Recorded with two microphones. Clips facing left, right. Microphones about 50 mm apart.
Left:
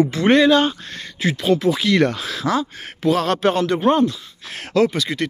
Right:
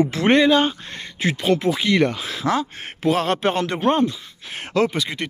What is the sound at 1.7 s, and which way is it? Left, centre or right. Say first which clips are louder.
Speech: left 1 dB; centre.